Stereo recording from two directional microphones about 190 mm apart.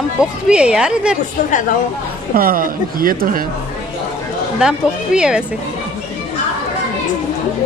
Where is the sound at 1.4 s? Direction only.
45° left (ahead or behind).